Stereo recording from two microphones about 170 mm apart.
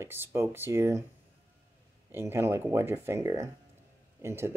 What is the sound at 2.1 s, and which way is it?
A man's voice, 15° right (ahead or behind).